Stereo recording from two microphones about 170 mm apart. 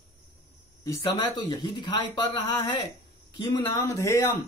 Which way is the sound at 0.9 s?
25° left (ahead or behind).